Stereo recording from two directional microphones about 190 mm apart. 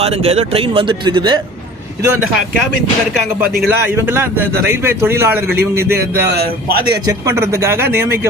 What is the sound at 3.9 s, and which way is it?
A man's voice, 15° right (ahead or behind).